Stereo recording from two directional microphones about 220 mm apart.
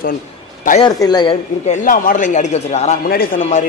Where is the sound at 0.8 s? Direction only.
20° left (ahead or behind).